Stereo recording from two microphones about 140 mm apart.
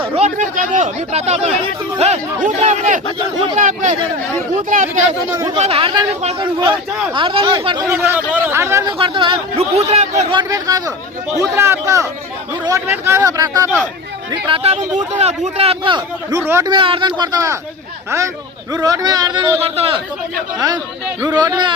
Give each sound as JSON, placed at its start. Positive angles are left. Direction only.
{"t": 0.0, "sound": "a sound", "side_deg": -45}
{"t": 0.3, "sound": "a man's voice", "side_deg": -65}
{"t": 5.5, "sound": "a man's voice", "side_deg": -45}
{"t": 7.9, "sound": "a man's voice", "side_deg": -15}
{"t": 8.9, "sound": "a man's voice", "side_deg": -35}
{"t": 10.3, "sound": "speech", "side_deg": -25}
{"t": 14.4, "sound": "a man's voice", "side_deg": -45}
{"t": 16.3, "sound": "speech", "side_deg": -20}
{"t": 16.6, "sound": "a man's voice", "side_deg": -40}
{"t": 18.7, "sound": "speech", "side_deg": -30}
{"t": 19.6, "sound": "a man's voice", "side_deg": -45}
{"t": 21.2, "sound": "a man's voice", "side_deg": -30}